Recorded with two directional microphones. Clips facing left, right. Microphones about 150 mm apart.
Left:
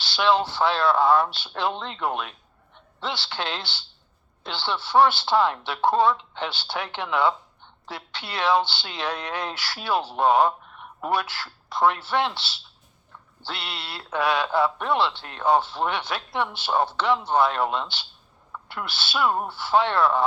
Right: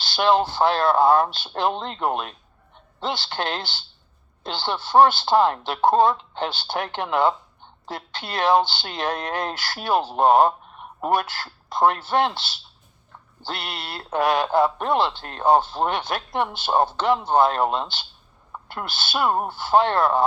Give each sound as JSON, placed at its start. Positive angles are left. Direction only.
{"t": 0.0, "sound": "speech", "side_deg": -45}